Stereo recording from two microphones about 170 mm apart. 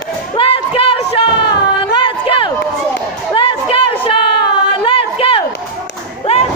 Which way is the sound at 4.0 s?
30° left (ahead or behind).